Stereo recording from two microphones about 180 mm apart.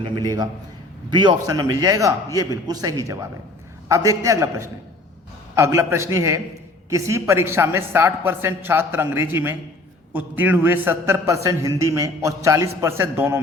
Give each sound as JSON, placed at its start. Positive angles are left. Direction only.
{"t": 0.0, "sound": "a man's voice", "side_deg": -20}